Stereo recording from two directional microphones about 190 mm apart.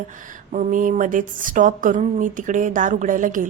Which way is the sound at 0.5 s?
45° right (ahead or behind).